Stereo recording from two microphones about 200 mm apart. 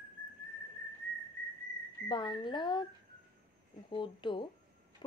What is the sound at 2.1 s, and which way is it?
Speech, 25° left (ahead or behind).